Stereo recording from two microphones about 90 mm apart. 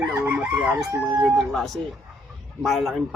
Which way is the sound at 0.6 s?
Centre (ahead or behind).